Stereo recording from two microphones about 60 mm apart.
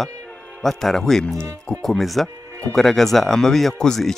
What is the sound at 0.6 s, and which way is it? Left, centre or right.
Speech, centre.